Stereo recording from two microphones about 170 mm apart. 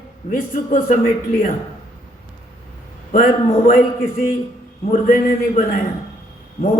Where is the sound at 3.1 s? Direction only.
55° left (ahead or behind).